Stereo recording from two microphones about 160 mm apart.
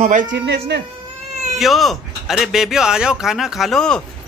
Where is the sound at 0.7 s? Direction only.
90° right.